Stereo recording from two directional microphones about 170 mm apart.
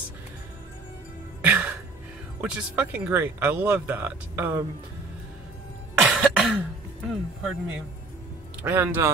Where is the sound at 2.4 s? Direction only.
5° right (ahead or behind).